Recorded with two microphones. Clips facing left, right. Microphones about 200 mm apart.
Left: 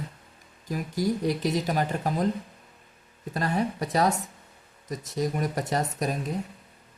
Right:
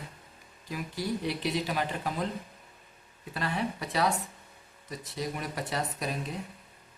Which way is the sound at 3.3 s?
45° left (ahead or behind).